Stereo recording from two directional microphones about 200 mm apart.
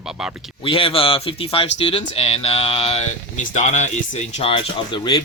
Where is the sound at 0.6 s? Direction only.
25° left (ahead or behind).